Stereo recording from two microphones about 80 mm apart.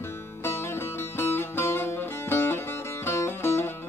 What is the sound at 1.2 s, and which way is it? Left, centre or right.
Music, left.